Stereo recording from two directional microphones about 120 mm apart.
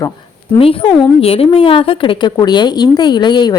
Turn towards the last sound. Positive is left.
turn(degrees=35)  # may be behind; listen again after turning